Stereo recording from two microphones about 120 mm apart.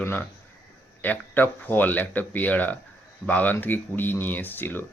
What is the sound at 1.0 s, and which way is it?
Speech, 15° left (ahead or behind).